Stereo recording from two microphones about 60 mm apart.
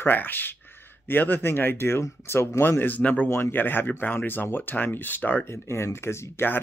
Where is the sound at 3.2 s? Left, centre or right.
Left.